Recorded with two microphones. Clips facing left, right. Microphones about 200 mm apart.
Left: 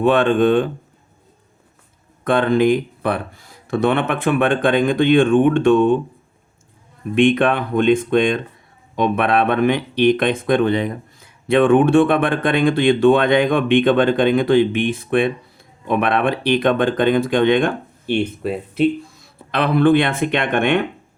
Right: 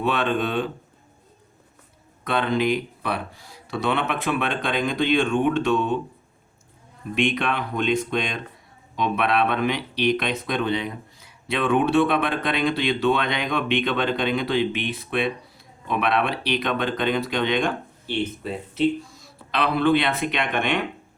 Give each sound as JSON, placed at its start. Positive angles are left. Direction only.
{"t": 0.0, "sound": "speech", "side_deg": 50}
{"t": 2.2, "sound": "speech", "side_deg": 50}
{"t": 7.2, "sound": "speech", "side_deg": 50}